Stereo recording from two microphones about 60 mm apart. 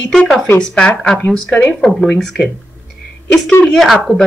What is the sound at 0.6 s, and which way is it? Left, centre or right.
Speech, centre.